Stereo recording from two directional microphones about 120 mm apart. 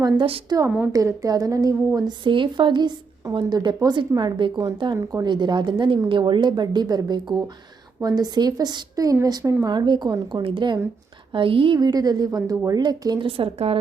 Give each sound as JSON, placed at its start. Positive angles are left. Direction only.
{"t": 0.5, "sound": "a woman's voice", "side_deg": -35}
{"t": 2.2, "sound": "a woman's voice", "side_deg": -40}
{"t": 9.6, "sound": "a woman's voice", "side_deg": -40}
{"t": 13.2, "sound": "speech", "side_deg": -50}